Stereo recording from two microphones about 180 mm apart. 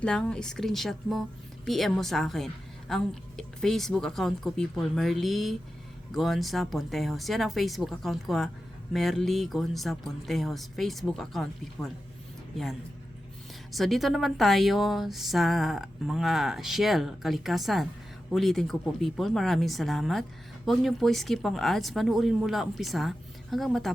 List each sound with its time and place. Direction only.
0.0 s speech: 5° left (ahead or behind)
13.7 s speech: centre (ahead or behind)